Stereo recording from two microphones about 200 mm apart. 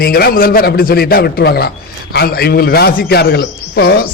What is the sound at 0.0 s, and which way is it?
A man's voice, 50° left (ahead or behind).